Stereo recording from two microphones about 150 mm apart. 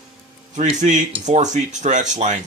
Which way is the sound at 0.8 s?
55° right (ahead or behind).